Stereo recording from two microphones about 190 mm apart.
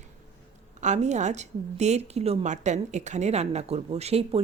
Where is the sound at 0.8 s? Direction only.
40° right (ahead or behind).